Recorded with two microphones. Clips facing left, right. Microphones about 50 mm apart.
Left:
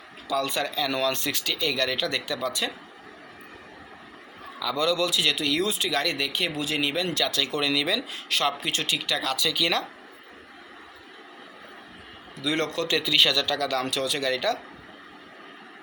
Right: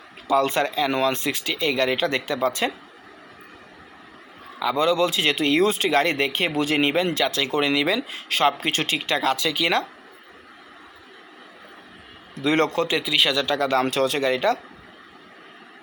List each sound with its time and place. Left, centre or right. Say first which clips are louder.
0.3 s speech: right 7 dB; right
4.6 s speech: right 5 dB; right
12.4 s speech: right 6 dB; right
13.0 s speech: right 1 dB; centre